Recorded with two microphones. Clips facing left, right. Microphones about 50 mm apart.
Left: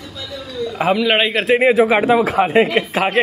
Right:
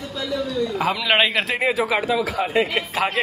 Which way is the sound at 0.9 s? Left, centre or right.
Centre.